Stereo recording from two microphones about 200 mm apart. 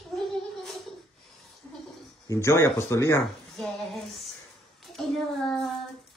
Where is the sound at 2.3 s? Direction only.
15° left (ahead or behind).